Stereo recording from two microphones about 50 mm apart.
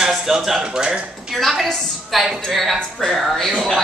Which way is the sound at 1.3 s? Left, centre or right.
Centre.